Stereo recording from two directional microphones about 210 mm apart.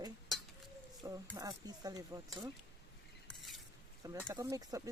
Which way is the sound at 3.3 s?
Centre (ahead or behind).